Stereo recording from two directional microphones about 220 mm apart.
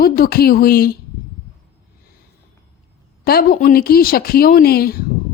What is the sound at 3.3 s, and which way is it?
A woman's voice, 45° left (ahead or behind).